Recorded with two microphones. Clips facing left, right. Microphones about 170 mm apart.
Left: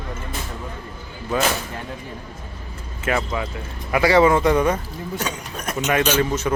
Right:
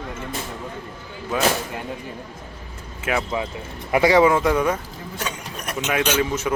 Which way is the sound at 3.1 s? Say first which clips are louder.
Left 1 dB; 5° right (ahead or behind).